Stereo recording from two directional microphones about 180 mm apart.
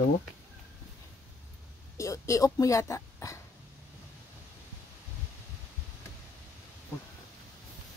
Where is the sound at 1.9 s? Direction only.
15° left (ahead or behind).